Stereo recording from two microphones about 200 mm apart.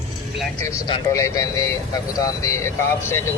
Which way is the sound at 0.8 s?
20° left (ahead or behind).